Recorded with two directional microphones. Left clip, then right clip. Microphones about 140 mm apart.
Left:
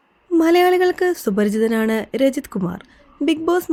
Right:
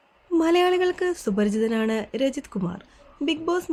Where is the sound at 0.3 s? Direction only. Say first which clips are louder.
Left 6 dB; 35° left (ahead or behind).